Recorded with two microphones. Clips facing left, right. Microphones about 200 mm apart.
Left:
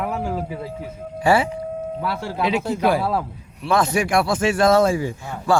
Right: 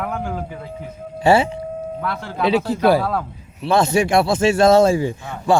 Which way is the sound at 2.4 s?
35° right (ahead or behind).